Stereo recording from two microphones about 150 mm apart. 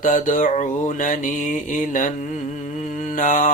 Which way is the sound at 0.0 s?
55° left (ahead or behind).